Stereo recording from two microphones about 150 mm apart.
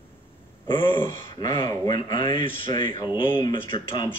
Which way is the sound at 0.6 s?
35° left (ahead or behind).